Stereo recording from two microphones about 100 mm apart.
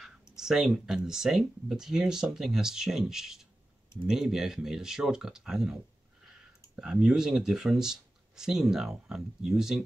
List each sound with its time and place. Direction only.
0.4 s speech: 5° right (ahead or behind)